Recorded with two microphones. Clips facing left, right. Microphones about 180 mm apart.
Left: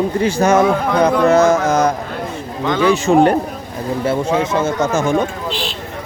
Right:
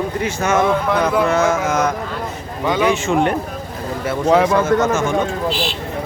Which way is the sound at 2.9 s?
35° left (ahead or behind).